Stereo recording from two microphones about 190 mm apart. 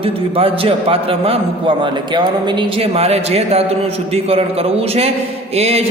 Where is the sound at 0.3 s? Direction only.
30° right (ahead or behind).